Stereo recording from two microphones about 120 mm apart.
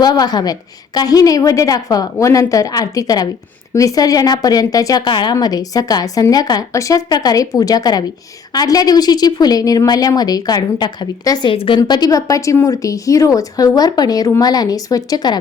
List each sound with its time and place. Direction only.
0.0 s a woman's voice: 35° left (ahead or behind)
11.5 s a woman's voice: 50° left (ahead or behind)
11.8 s a woman's voice: 35° left (ahead or behind)